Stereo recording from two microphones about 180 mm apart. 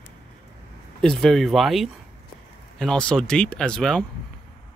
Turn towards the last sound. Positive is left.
turn(degrees=5)  # may be behind; listen again after turning